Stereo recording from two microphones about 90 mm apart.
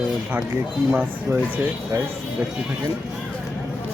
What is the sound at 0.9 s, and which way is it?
Speech, 20° right (ahead or behind).